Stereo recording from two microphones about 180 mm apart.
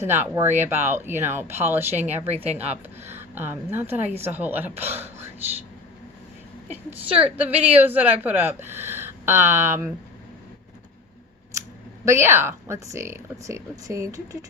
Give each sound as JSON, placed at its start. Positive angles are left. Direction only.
{"t": 0.0, "sound": "speech", "side_deg": -15}
{"t": 2.2, "sound": "a woman's voice", "side_deg": -40}
{"t": 2.6, "sound": "speech", "side_deg": -10}
{"t": 7.3, "sound": "speech", "side_deg": -10}
{"t": 12.0, "sound": "speech", "side_deg": -15}